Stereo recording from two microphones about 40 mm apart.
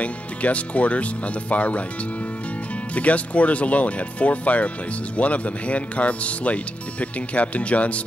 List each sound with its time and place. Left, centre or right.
0.0 s speech: left
2.9 s speech: left